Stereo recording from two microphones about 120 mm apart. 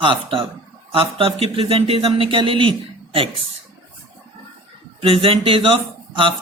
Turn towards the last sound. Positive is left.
turn(degrees=-45)  # may be behind; listen again after turning